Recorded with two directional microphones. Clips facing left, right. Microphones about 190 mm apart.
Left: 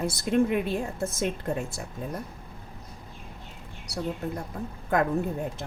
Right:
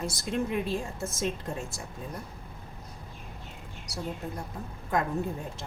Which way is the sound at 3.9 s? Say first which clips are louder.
Left 5 dB; 60° left (ahead or behind).